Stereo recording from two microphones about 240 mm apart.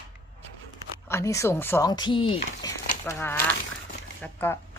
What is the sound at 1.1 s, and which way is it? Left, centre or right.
Speech, centre.